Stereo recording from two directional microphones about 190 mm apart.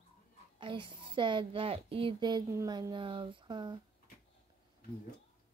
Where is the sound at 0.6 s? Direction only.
25° right (ahead or behind).